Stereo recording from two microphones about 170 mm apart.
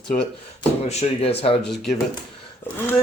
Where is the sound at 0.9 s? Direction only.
35° left (ahead or behind).